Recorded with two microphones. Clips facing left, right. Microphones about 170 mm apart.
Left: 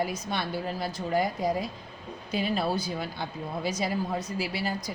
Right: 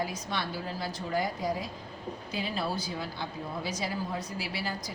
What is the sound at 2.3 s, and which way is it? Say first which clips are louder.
Speech: left 6 dB; 60° left (ahead or behind).